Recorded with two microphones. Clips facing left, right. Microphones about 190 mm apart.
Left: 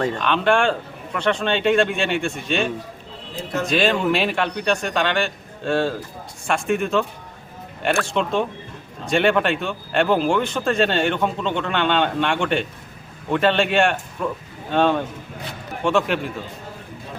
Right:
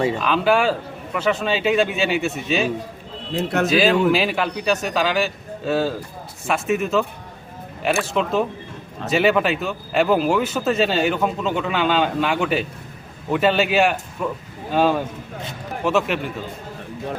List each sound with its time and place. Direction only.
0.0 s speech: 5° right (ahead or behind)
3.3 s speech: 65° right (ahead or behind)
3.7 s speech: centre (ahead or behind)